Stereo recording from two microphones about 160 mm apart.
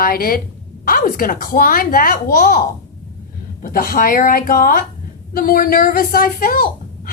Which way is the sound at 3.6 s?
65° left (ahead or behind).